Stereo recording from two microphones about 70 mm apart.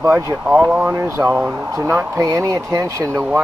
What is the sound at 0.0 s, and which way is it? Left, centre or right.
Speech, right.